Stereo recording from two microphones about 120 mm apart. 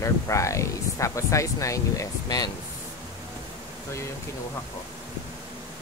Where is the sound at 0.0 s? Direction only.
25° left (ahead or behind).